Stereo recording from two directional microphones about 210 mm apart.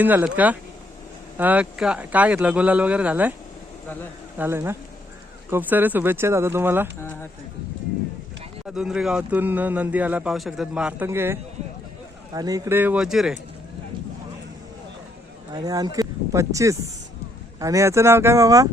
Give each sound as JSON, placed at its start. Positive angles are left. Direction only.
{"t": 0.0, "sound": "speech", "side_deg": -10}
{"t": 4.4, "sound": "speech", "side_deg": -10}
{"t": 7.0, "sound": "speech", "side_deg": 10}
{"t": 8.6, "sound": "speech", "side_deg": -5}
{"t": 15.5, "sound": "speech", "side_deg": -15}